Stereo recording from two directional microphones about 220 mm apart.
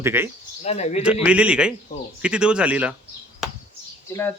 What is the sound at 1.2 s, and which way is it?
Speech, 5° right (ahead or behind).